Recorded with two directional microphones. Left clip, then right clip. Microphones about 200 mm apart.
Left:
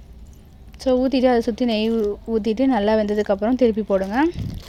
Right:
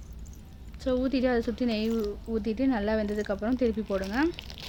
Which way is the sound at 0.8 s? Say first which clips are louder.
Left 9 dB; 25° left (ahead or behind).